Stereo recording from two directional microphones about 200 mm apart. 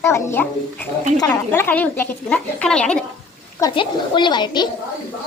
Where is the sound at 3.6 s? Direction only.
20° left (ahead or behind).